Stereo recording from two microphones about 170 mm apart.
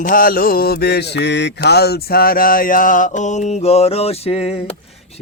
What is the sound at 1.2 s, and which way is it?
Mantra, 90° left.